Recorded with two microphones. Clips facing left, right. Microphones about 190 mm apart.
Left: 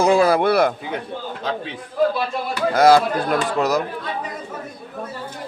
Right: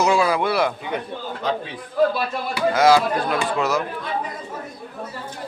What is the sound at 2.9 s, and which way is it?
Speech, 45° left (ahead or behind).